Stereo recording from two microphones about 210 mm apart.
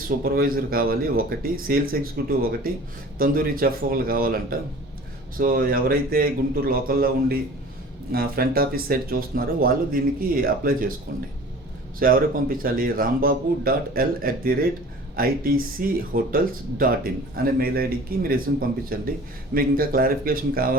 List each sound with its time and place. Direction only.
0.3 s speech: 45° right (ahead or behind)
11.9 s speech: 45° right (ahead or behind)